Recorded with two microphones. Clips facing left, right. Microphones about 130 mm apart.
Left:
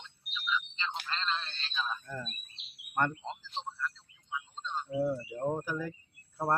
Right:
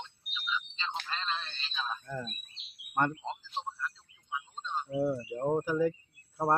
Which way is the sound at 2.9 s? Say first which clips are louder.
Right 1 dB; 10° right (ahead or behind).